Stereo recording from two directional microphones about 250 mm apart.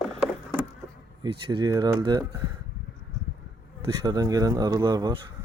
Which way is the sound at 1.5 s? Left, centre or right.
Centre.